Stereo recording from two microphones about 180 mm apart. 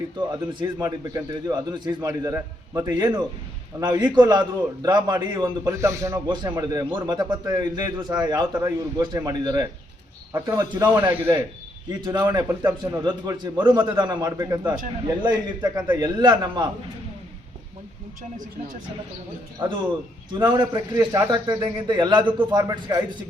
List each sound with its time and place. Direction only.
0.3 s a man's voice: 20° right (ahead or behind)
11.1 s a man's voice: 10° right (ahead or behind)
11.9 s a man's voice: 25° right (ahead or behind)
20.4 s a man's voice: 25° right (ahead or behind)